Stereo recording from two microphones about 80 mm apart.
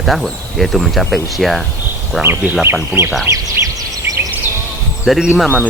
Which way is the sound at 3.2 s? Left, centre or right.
Right.